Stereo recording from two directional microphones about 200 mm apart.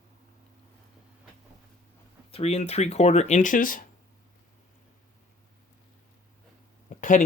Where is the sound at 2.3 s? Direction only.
30° left (ahead or behind).